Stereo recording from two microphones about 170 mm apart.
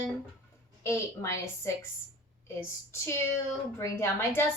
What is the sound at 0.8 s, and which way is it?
Speech, 15° left (ahead or behind).